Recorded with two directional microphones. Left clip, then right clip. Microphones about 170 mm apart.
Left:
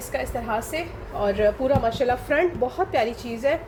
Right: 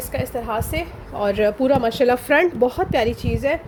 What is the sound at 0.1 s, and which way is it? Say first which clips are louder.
A woman's voice: right 2 dB; 60° right (ahead or behind).